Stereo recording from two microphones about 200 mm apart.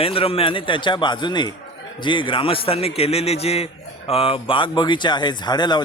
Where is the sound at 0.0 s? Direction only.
30° left (ahead or behind).